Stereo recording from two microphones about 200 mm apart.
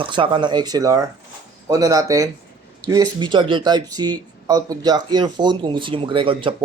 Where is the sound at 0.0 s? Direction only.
25° right (ahead or behind).